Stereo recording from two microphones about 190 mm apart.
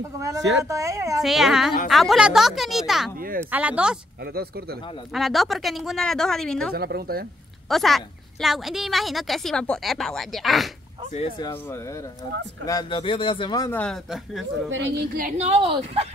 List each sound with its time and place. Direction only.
0.7 s speech: 15° right (ahead or behind)
1.2 s speech: centre (ahead or behind)
4.2 s speech: 55° right (ahead or behind)
5.1 s speech: centre (ahead or behind)
6.7 s speech: 55° right (ahead or behind)
7.7 s speech: centre (ahead or behind)
11.1 s a man's voice: 20° left (ahead or behind)
13.7 s speech: 5° left (ahead or behind)
14.7 s a woman's voice: 70° right (ahead or behind)
15.1 s a woman's voice: 40° right (ahead or behind)